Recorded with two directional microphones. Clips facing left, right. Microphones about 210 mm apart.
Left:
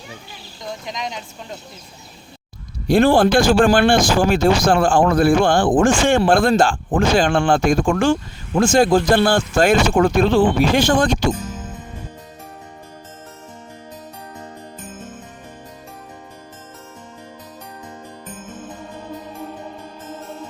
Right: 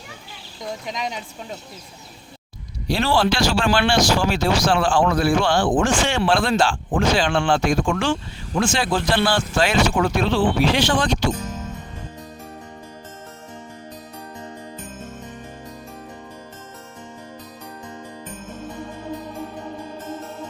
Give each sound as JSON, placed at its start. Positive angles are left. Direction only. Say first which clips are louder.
{"t": 0.9, "sound": "speech", "louder": "even", "side_deg": -5}
{"t": 2.8, "sound": "speech", "louder": "left 7 dB", "side_deg": 55}